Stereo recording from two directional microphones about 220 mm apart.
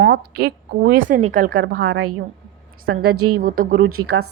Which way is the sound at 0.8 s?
35° right (ahead or behind).